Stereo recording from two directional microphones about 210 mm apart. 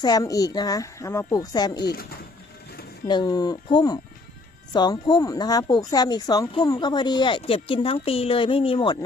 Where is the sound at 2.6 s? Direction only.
50° left (ahead or behind).